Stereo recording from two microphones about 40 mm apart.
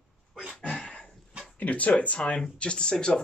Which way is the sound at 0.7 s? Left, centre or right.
Left.